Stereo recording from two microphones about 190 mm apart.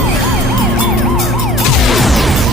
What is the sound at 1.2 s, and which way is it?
Emergency vehicle, centre (ahead or behind).